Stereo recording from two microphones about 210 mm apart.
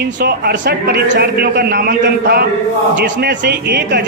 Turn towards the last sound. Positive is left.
turn(degrees=-50)  # may be behind; listen again after turning